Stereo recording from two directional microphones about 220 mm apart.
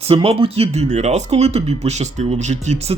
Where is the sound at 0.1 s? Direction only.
25° right (ahead or behind).